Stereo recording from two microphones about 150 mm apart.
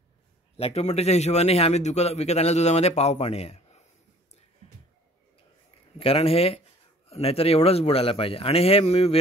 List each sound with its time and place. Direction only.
0.6 s speech: 45° left (ahead or behind)
5.9 s a man's voice: 40° left (ahead or behind)